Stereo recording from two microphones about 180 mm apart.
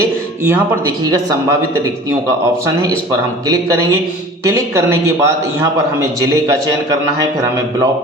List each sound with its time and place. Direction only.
1.1 s a man's voice: 15° right (ahead or behind)
3.1 s a man's voice: 20° right (ahead or behind)